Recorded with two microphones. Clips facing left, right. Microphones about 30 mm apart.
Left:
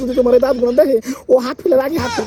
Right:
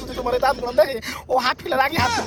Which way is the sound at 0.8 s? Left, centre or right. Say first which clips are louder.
Left 6 dB; right.